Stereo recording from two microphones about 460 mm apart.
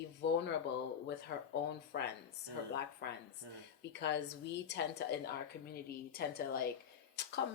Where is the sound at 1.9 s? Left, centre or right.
Left.